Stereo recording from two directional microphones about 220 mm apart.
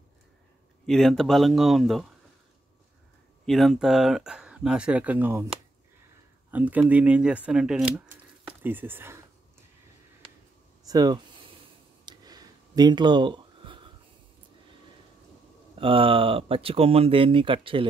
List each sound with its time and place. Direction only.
0.8 s speech: centre (ahead or behind)
3.4 s speech: centre (ahead or behind)
6.5 s speech: 5° right (ahead or behind)
7.9 s a sound: 10° right (ahead or behind)
10.9 s speech: 15° right (ahead or behind)
12.1 s a sound: 15° right (ahead or behind)
15.8 s speech: 25° right (ahead or behind)